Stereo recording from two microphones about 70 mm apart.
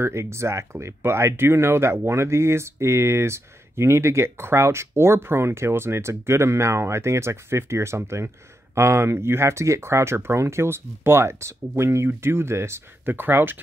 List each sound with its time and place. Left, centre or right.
0.0 s speech: right